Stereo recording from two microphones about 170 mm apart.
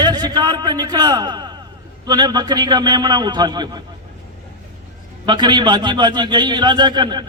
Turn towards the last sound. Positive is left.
turn(degrees=-25)  # may be behind; listen again after turning